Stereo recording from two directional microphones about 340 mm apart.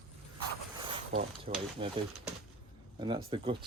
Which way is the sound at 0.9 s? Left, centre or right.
Centre.